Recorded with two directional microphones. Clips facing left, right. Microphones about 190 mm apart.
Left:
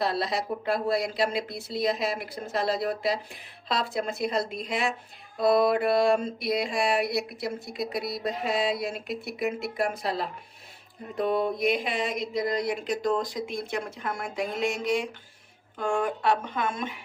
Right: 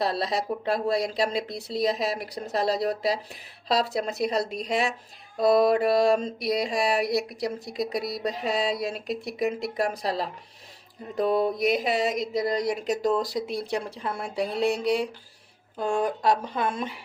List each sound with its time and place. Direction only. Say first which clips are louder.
0.0 s speech: right 1 dB; 35° right (ahead or behind)